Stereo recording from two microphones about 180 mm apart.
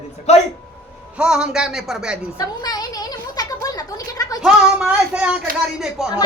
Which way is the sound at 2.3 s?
20° left (ahead or behind).